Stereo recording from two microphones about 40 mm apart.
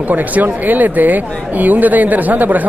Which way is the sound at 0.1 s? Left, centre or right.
Right.